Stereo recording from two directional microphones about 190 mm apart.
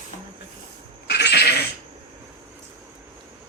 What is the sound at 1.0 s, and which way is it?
Cat, 60° left (ahead or behind).